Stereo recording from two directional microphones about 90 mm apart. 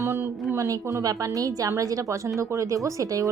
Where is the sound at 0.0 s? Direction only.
30° right (ahead or behind).